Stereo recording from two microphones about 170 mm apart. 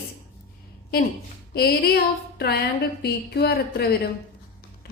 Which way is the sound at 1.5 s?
60° left (ahead or behind).